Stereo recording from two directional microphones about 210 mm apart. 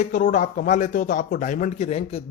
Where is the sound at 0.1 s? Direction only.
35° left (ahead or behind).